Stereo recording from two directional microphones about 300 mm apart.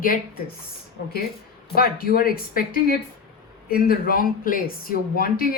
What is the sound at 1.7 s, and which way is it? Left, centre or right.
Speech, left.